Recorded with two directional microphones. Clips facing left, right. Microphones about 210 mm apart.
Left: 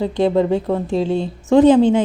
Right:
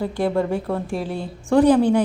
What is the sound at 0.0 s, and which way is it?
Speech, 20° left (ahead or behind).